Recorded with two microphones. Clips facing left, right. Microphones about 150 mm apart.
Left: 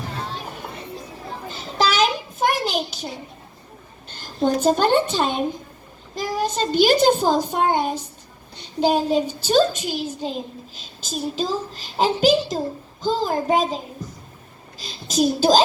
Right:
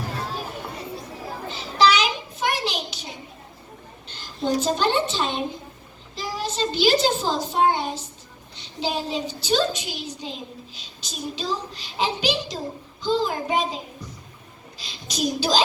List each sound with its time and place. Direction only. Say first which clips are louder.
1.5 s a sound: right 3 dB; 45° left (ahead or behind)
4.1 s a woman's voice: left 3 dB; 50° left (ahead or behind)
8.5 s child singing: left 8 dB; 50° left (ahead or behind)
9.4 s a child's voice: left 1 dB; 50° left (ahead or behind)
14.8 s a child's voice: left 7 dB; 45° left (ahead or behind)